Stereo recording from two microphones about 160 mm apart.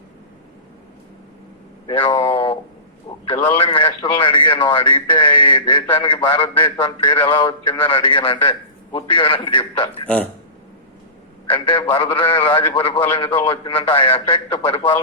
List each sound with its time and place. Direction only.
1.9 s a sound: 30° left (ahead or behind)
3.2 s a man's voice: 35° left (ahead or behind)
11.5 s a man's voice: 35° left (ahead or behind)